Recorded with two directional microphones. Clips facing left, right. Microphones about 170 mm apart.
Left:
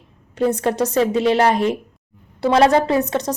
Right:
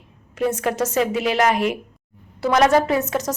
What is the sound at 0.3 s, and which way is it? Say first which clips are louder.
A woman's voice: left 3 dB; 35° left (ahead or behind).